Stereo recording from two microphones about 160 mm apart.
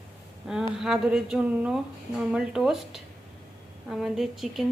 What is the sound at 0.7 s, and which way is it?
Speech, 5° right (ahead or behind).